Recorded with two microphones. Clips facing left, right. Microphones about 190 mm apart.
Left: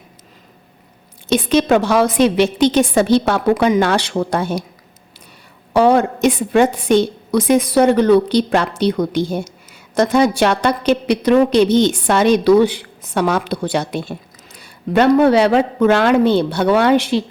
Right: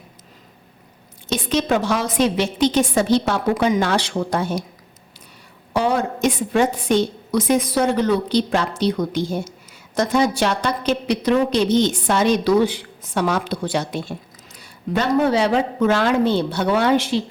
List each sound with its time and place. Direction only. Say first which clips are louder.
1.3 s a woman's voice: left 6 dB; 65° left (ahead or behind)
5.7 s a woman's voice: left 7 dB; 60° left (ahead or behind)